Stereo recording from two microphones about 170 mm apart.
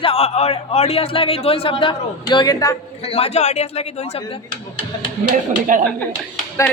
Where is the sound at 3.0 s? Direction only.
35° left (ahead or behind).